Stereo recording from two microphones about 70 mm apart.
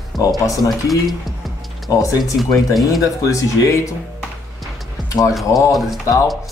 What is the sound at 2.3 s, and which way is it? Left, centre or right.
Speech, centre.